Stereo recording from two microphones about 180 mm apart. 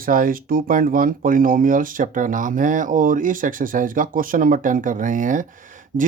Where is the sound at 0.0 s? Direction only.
50° right (ahead or behind).